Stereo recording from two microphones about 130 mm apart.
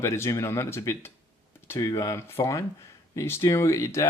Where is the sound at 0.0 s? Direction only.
20° left (ahead or behind).